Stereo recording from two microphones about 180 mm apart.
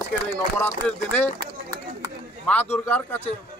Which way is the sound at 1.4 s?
20° right (ahead or behind).